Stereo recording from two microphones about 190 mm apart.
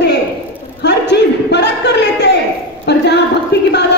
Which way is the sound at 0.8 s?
65° left (ahead or behind).